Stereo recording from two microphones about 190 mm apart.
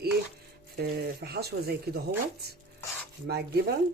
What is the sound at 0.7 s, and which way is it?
Speech, 55° right (ahead or behind).